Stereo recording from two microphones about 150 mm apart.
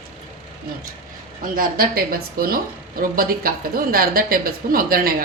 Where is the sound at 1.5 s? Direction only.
75° right (ahead or behind).